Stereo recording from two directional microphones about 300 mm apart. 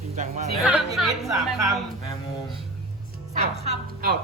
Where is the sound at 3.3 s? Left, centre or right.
Right.